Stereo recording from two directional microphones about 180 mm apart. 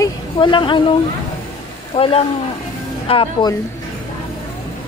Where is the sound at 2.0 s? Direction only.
35° left (ahead or behind).